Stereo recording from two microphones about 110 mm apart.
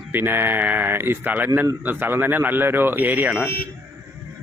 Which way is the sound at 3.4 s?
20° left (ahead or behind).